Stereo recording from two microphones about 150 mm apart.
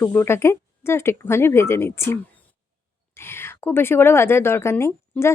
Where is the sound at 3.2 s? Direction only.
15° left (ahead or behind).